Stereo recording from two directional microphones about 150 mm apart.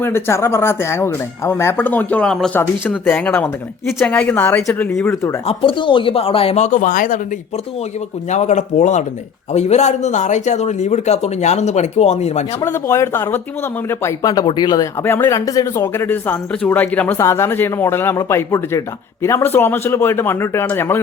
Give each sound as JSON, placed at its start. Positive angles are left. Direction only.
{"t": 0.0, "sound": "speech", "side_deg": 15}
{"t": 2.6, "sound": "speech", "side_deg": 15}
{"t": 5.5, "sound": "speech", "side_deg": 35}
{"t": 8.3, "sound": "speech", "side_deg": 50}
{"t": 12.6, "sound": "speech", "side_deg": 20}
{"t": 15.0, "sound": "speech", "side_deg": 15}